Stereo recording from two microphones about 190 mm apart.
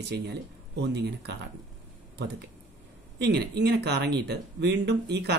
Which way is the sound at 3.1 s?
60° right (ahead or behind).